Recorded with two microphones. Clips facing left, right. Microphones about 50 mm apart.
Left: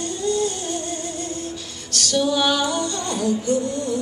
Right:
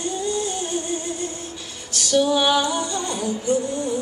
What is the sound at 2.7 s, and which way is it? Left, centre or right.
Music, centre.